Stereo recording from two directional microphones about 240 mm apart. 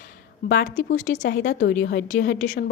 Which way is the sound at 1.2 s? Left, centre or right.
Left.